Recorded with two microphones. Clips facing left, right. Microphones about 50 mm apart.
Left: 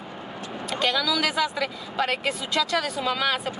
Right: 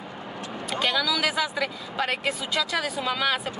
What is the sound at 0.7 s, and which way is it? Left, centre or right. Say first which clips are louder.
Speech: left 1 dB; centre.